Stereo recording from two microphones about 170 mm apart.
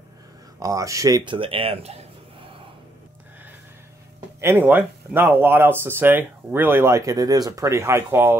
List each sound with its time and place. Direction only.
0.6 s speech: 20° right (ahead or behind); by 2.0 s 35° right (ahead or behind)
4.4 s speech: 15° right (ahead or behind)